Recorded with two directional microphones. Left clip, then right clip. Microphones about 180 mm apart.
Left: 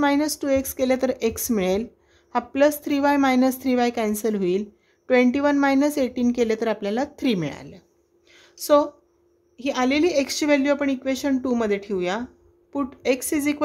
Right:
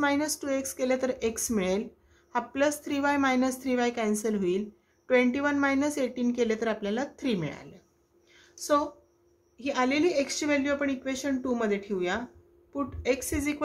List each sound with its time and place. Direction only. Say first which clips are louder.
0.0 s a woman's voice: left 6 dB; 40° left (ahead or behind)
8.3 s a sound: left 8 dB; 50° left (ahead or behind)
9.6 s a woman's voice: left 5 dB; 45° left (ahead or behind)